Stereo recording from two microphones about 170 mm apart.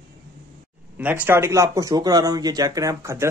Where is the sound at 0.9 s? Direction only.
10° right (ahead or behind).